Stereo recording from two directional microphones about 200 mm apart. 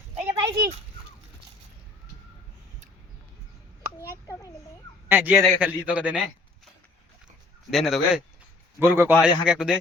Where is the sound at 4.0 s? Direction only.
15° left (ahead or behind).